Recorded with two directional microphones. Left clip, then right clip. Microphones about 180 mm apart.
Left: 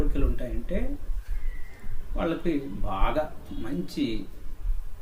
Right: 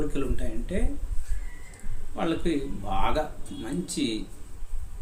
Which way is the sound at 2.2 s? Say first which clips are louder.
Even; 15° right (ahead or behind).